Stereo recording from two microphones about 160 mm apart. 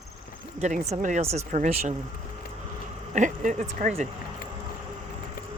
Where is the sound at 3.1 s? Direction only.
50° right (ahead or behind).